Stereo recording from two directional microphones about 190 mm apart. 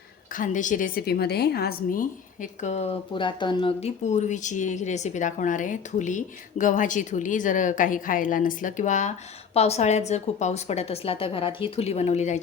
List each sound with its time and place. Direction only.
0.3 s a woman's voice: 40° left (ahead or behind)